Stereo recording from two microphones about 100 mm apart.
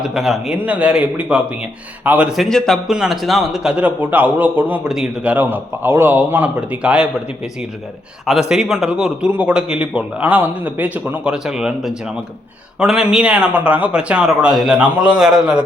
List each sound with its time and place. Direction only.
0.0 s a man's voice: 5° right (ahead or behind)
2.3 s a man's voice: centre (ahead or behind)
8.2 s a man's voice: 5° right (ahead or behind)